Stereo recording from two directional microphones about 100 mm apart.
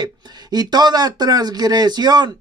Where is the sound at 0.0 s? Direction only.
45° right (ahead or behind).